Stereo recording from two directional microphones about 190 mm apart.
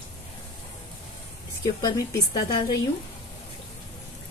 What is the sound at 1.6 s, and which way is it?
Speech, 20° left (ahead or behind).